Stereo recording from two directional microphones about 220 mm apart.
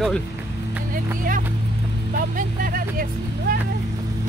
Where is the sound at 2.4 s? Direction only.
40° right (ahead or behind).